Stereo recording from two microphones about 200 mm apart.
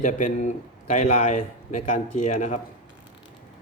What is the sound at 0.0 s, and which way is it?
A man's voice, 40° left (ahead or behind).